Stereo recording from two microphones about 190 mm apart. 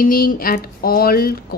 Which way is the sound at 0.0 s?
50° left (ahead or behind).